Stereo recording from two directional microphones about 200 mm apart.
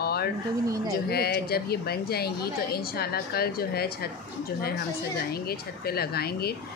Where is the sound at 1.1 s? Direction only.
50° left (ahead or behind).